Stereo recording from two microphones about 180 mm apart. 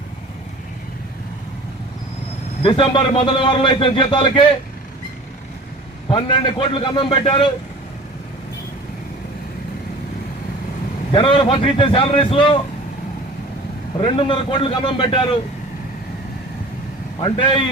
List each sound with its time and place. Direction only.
2.6 s a man's voice: 30° left (ahead or behind)
6.1 s a man's voice: 30° left (ahead or behind)
11.1 s a man's voice: 30° left (ahead or behind)
14.0 s a man's voice: 25° left (ahead or behind)
17.2 s a man's voice: 25° left (ahead or behind)